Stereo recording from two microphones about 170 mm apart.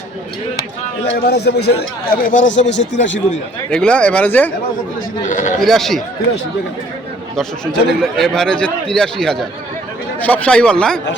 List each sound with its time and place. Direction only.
1.0 s a man's voice: 70° left (ahead or behind)
2.0 s speech: 55° left (ahead or behind)
2.6 s speech: 90° left
3.7 s speech: 5° left (ahead or behind)
5.3 s a man's voice: 50° left (ahead or behind)
5.5 s a man's voice: centre (ahead or behind)
7.3 s a man's voice: centre (ahead or behind)